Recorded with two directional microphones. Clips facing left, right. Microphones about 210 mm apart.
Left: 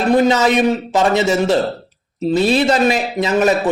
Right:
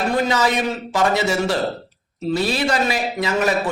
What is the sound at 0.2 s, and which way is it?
A man's voice, 20° left (ahead or behind).